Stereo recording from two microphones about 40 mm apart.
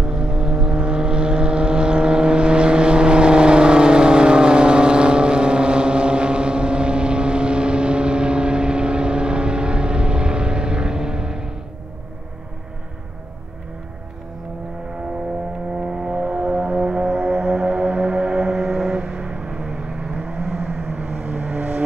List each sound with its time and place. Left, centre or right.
0.0 s vehicle: centre
15.8 s a sound: right
16.2 s music: right; by 20.6 s centre
20.6 s vehicle: right